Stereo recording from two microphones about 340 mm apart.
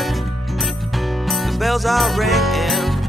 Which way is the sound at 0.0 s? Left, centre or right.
Centre.